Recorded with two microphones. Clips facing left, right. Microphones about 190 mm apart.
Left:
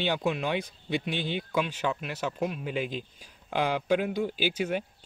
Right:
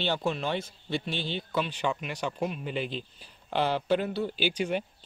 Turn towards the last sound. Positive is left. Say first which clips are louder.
# even
turn(degrees=5)  # may be behind; listen again after turning